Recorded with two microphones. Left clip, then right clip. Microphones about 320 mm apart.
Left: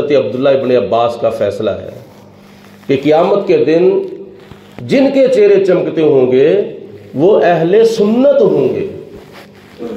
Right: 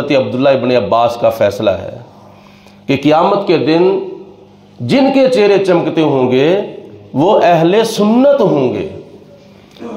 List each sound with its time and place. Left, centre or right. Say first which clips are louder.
0.1 s a man's voice: right 1 dB; right
2.9 s a man's voice: even; right
4.8 s a man's voice: even; right